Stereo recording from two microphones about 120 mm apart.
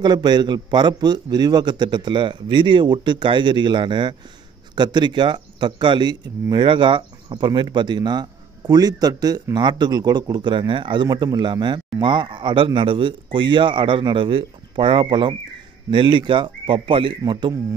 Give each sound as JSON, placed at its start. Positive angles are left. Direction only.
{"t": 0.0, "sound": "speech", "side_deg": -35}
{"t": 17.2, "sound": "speech", "side_deg": -35}